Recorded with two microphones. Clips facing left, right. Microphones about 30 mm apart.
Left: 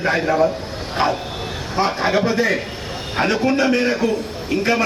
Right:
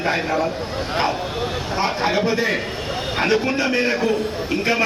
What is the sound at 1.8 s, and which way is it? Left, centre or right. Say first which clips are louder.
A man's voice: left 3 dB; centre.